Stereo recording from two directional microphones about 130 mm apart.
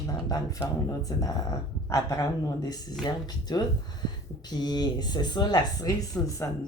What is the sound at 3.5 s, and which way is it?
Speech, 35° left (ahead or behind).